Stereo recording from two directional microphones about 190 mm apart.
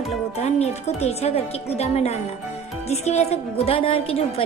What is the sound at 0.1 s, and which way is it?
A woman's voice, 35° left (ahead or behind).